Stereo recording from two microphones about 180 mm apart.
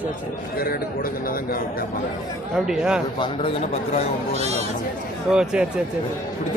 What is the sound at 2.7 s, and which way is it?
Speech, 5° right (ahead or behind).